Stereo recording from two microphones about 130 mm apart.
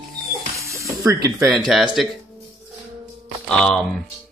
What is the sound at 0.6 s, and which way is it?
Spray, 25° right (ahead or behind).